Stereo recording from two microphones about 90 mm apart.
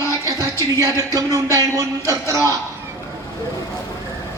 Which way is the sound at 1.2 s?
40° right (ahead or behind).